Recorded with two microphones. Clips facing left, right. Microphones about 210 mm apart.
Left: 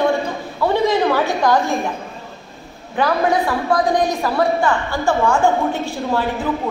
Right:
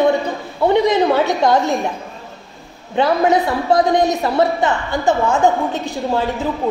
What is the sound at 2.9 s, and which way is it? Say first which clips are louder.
A woman's voice: right 3 dB; 20° right (ahead or behind).